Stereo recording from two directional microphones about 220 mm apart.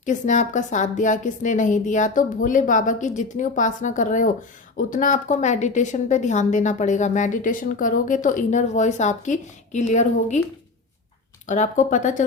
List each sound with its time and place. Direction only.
0.0 s a woman's voice: 35° left (ahead or behind)
11.4 s a woman's voice: 35° left (ahead or behind)